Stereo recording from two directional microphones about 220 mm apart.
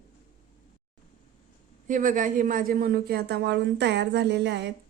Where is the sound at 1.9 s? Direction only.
35° right (ahead or behind).